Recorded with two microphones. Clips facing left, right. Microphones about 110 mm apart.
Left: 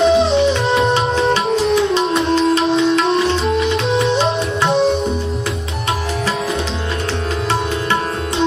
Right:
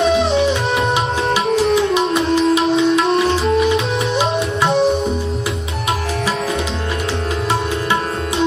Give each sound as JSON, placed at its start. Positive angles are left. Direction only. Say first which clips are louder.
{"t": 0.0, "sound": "music", "louder": "left 2 dB", "side_deg": 25}
{"t": 1.3, "sound": "music", "louder": "even", "side_deg": -5}